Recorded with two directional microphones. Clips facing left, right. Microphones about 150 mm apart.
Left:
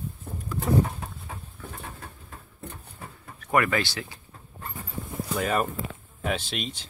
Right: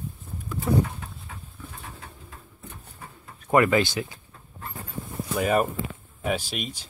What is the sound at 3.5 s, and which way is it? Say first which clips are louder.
Speech: right 4 dB; 20° right (ahead or behind).